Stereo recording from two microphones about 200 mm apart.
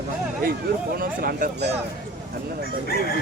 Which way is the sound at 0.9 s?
45° right (ahead or behind).